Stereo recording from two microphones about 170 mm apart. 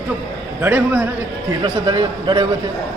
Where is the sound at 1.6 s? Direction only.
25° right (ahead or behind).